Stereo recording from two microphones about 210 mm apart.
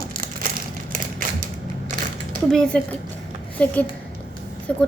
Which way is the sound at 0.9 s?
40° right (ahead or behind).